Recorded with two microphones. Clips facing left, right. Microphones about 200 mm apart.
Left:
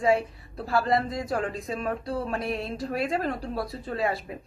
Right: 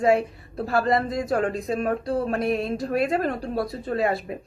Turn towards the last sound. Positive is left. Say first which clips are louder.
# right 4 dB
turn(degrees=-50)  # may be behind; listen again after turning